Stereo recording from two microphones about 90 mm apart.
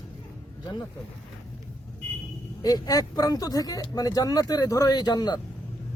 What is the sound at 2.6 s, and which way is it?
Speech, 45° left (ahead or behind).